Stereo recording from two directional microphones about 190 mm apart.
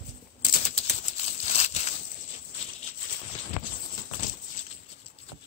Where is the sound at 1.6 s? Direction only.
35° left (ahead or behind).